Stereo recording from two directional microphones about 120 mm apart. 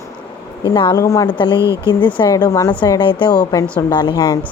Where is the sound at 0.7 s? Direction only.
40° left (ahead or behind).